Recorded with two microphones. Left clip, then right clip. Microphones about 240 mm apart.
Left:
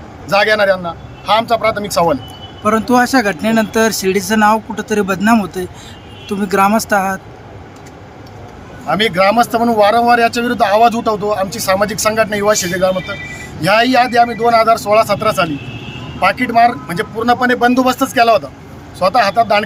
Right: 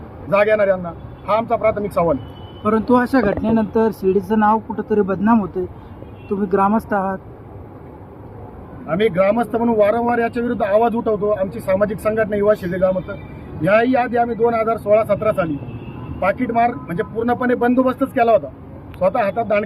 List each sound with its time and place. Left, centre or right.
0.3 s speech: centre
2.6 s speech: left
4.3 s speech: left
6.4 s speech: left
8.9 s speech: centre